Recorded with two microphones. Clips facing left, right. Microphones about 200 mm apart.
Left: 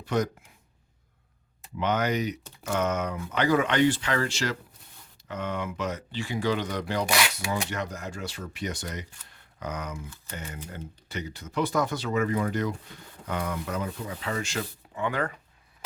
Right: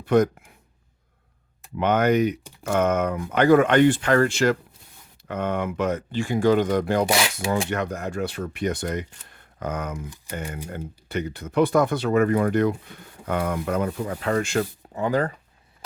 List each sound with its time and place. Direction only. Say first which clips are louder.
0.0 s speech: right 8 dB; 55° right (ahead or behind)
1.8 s speech: right 7 dB; 55° right (ahead or behind)
14.9 s speech: right 6 dB; 35° right (ahead or behind)